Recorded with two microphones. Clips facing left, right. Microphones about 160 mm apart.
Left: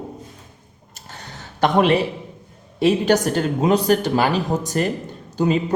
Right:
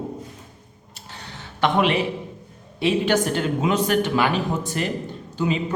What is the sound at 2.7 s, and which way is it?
Speech, 40° left (ahead or behind).